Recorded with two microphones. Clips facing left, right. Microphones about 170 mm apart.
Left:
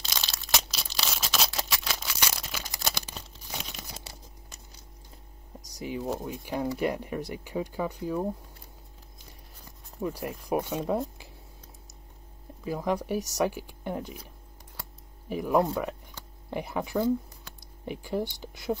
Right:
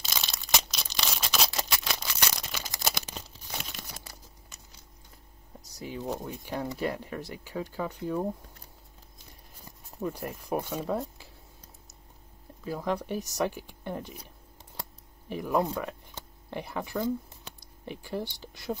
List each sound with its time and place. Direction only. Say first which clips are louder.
0.0 s a sound: even; centre (ahead or behind)
2.8 s crumpling: right 2 dB; centre (ahead or behind)
5.8 s speech: left 4 dB; 15° left (ahead or behind)
6.0 s speech: left 2 dB; 5° left (ahead or behind)
9.9 s speech: left 1 dB; 5° left (ahead or behind)
12.6 s speech: left 2 dB; 10° left (ahead or behind)
15.2 s speech: left 3 dB; 10° left (ahead or behind)
17.5 s a sound: right 2 dB; 20° right (ahead or behind)
17.8 s speech: left 4 dB; 15° left (ahead or behind)